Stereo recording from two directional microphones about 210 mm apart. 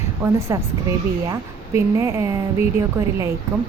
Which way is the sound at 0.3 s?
15° right (ahead or behind).